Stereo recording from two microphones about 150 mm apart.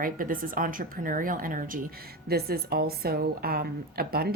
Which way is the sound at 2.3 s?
90° right.